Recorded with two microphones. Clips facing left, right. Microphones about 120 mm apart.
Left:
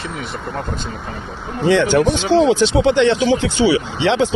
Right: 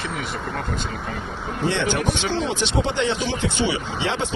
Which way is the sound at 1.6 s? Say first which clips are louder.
Left 9 dB; 90° left.